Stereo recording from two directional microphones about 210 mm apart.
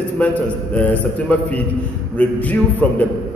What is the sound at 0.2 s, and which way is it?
A man's voice, 5° left (ahead or behind).